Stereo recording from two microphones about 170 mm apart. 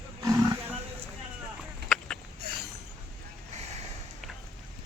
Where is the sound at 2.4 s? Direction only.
70° right (ahead or behind).